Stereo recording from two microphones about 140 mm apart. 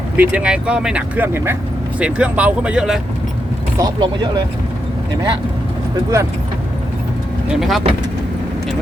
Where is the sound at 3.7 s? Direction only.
30° right (ahead or behind).